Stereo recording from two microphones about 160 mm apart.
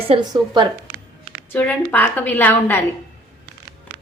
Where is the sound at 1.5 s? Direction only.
10° left (ahead or behind).